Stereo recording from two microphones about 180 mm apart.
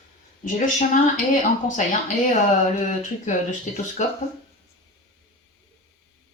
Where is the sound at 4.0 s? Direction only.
40° left (ahead or behind).